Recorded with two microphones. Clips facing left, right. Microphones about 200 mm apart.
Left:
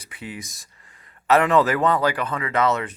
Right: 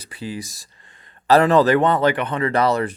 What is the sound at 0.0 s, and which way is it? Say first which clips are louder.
Speech: right 5 dB; 30° right (ahead or behind).